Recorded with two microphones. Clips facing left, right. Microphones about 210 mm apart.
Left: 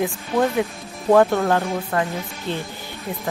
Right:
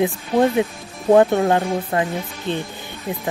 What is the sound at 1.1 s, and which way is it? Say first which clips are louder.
Speech: right 2 dB; 20° right (ahead or behind).